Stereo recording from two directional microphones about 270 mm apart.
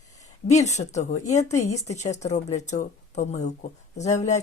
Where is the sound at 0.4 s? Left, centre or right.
Left.